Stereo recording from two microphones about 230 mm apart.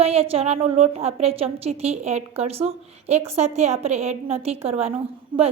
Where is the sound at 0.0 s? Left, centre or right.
Right.